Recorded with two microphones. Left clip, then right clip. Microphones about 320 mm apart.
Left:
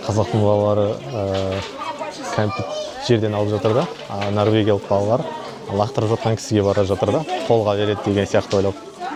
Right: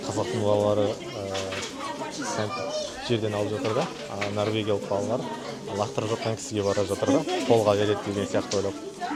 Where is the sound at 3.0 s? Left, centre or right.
Left.